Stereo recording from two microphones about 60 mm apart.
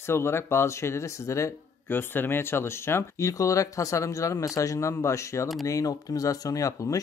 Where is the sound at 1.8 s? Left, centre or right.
Left.